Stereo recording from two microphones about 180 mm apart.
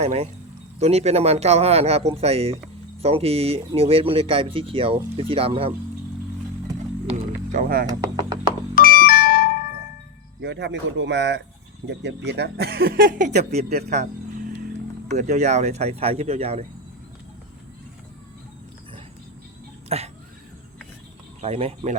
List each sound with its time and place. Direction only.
0.0 s speech: 35° right (ahead or behind)
7.5 s speech: 55° right (ahead or behind)
7.9 s a sound: 25° right (ahead or behind)
8.7 s music: 55° left (ahead or behind)
10.4 s speech: 75° right (ahead or behind); by 13.7 s 40° right (ahead or behind)
13.9 s vehicle: 40° right (ahead or behind)
15.1 s speech: 40° right (ahead or behind)
19.9 s speech: 35° right (ahead or behind)
21.4 s speech: 35° right (ahead or behind)